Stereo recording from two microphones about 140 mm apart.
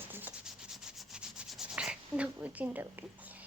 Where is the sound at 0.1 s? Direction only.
15° right (ahead or behind).